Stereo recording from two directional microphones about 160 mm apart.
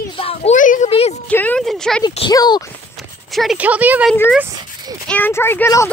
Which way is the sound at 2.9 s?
Centre (ahead or behind).